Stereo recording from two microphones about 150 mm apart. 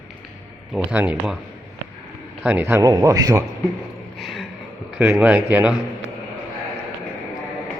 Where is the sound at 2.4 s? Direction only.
15° right (ahead or behind).